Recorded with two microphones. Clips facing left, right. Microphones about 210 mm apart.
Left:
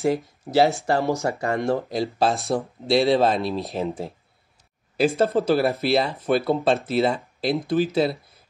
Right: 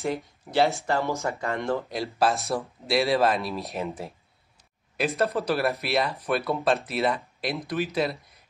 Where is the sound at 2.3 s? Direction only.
Centre (ahead or behind).